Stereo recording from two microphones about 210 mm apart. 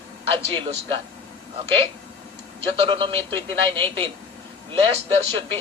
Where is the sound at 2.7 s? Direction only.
25° right (ahead or behind).